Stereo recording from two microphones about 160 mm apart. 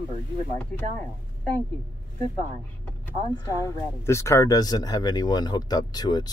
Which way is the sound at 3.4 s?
20° left (ahead or behind).